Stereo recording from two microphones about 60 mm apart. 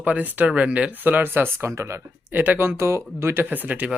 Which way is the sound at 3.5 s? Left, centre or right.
Right.